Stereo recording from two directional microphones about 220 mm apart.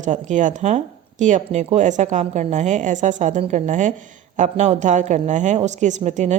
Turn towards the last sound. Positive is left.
turn(degrees=-30)  # may be behind; listen again after turning